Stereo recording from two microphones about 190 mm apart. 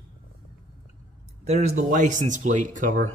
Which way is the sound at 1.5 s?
35° right (ahead or behind).